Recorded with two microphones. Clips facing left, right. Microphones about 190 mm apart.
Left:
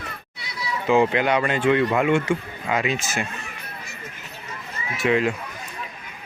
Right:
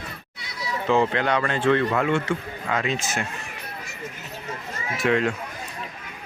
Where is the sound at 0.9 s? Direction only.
10° left (ahead or behind).